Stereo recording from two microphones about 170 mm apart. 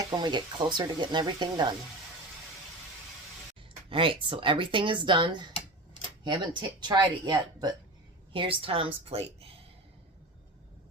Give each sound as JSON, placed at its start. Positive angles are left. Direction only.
{"t": 0.0, "sound": "speech", "side_deg": -25}
{"t": 3.8, "sound": "a woman's voice", "side_deg": -30}